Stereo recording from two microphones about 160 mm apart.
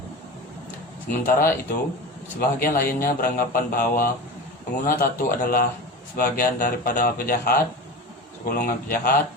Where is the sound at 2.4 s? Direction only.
65° left (ahead or behind).